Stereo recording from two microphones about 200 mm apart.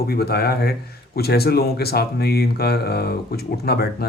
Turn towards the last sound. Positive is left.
turn(degrees=50)  # may be behind; listen again after turning